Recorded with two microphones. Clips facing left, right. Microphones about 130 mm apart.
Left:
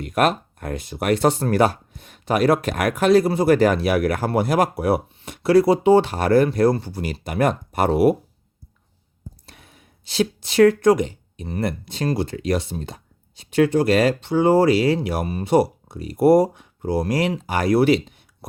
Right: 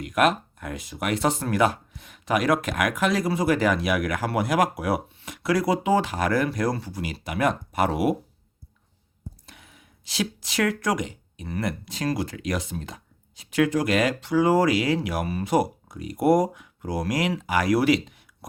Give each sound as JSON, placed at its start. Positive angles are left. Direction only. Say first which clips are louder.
{"t": 0.0, "sound": "speech", "louder": "left 2 dB", "side_deg": 30}
{"t": 9.5, "sound": "speech", "louder": "left 2 dB", "side_deg": 35}